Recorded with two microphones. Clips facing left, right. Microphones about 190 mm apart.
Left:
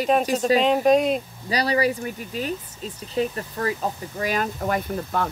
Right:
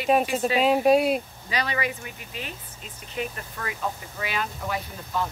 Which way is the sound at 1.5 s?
35° left (ahead or behind).